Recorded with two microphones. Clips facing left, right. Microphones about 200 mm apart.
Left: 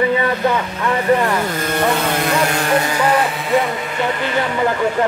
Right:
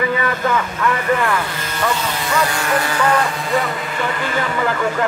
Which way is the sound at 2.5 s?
35° left (ahead or behind).